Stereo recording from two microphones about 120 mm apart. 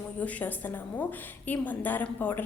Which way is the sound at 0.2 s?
10° left (ahead or behind).